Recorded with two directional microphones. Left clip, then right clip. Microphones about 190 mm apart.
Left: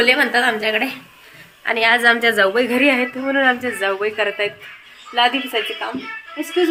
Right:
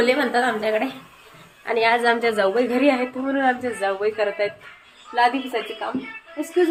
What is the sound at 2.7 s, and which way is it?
Speech, 20° left (ahead or behind).